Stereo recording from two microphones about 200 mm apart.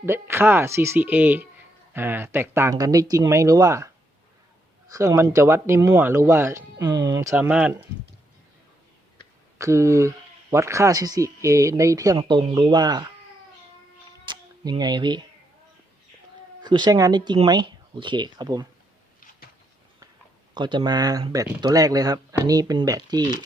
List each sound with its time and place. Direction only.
0.0 s speech: 10° right (ahead or behind)
4.9 s speech: 15° right (ahead or behind)
9.6 s speech: 15° right (ahead or behind)
14.3 s a sound: 20° right (ahead or behind)
16.6 s speech: 20° right (ahead or behind)
20.5 s speech: 25° right (ahead or behind)